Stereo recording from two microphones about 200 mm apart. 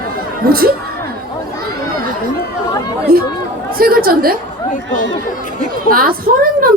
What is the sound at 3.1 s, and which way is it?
Speech, 50° right (ahead or behind).